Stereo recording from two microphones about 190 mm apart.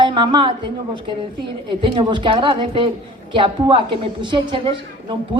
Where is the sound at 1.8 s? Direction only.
25° right (ahead or behind).